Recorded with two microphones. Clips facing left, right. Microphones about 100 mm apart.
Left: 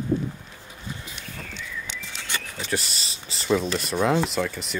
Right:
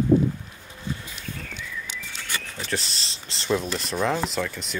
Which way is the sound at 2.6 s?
5° left (ahead or behind).